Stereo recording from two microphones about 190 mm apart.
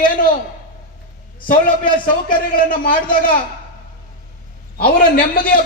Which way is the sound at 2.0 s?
45° left (ahead or behind).